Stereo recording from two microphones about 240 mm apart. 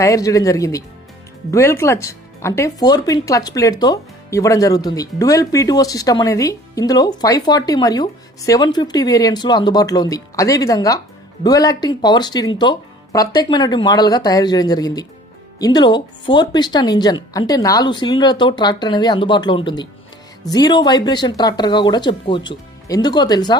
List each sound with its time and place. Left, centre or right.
0.0 s speech: centre